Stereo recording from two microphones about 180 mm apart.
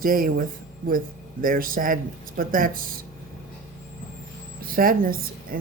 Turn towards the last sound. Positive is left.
turn(degrees=-55)  # may be behind; listen again after turning